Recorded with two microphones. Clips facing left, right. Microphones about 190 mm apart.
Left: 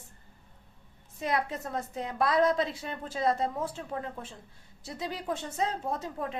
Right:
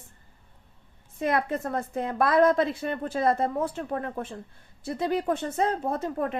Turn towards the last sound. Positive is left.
turn(degrees=-60)  # may be behind; listen again after turning